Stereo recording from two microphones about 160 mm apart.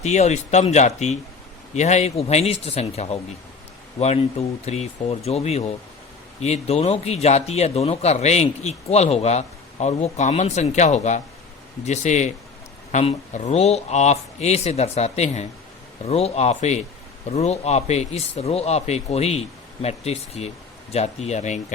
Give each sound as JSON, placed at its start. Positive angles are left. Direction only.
{"t": 0.0, "sound": "a man's voice", "side_deg": 45}